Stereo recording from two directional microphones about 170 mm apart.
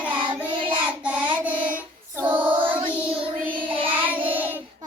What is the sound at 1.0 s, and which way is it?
Child singing, 10° right (ahead or behind).